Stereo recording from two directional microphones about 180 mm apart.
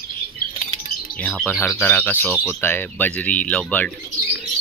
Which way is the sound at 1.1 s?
5° left (ahead or behind).